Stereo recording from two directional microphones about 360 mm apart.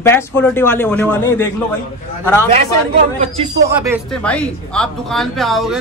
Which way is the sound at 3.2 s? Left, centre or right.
Centre.